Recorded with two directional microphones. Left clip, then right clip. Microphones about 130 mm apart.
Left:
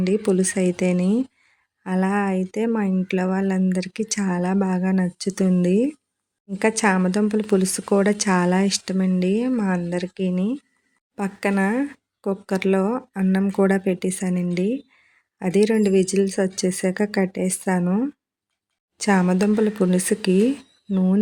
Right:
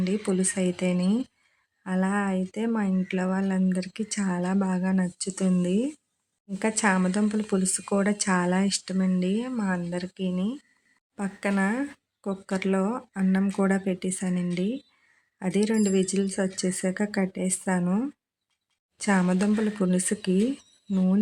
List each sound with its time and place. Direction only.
0.0 s speech: 30° left (ahead or behind)
18.9 s speech: 30° left (ahead or behind)